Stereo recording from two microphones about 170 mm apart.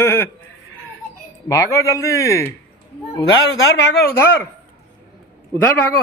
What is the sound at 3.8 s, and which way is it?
Speech, 80° left.